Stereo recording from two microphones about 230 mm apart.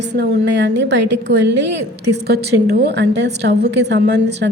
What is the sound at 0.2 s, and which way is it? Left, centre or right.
A woman's voice, right.